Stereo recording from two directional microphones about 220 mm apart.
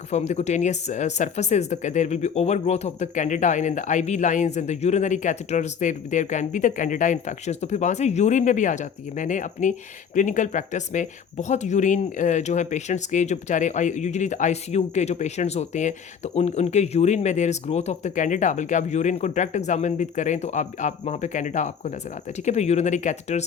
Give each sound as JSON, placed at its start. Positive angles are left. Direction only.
{"t": 0.1, "sound": "speech", "side_deg": 30}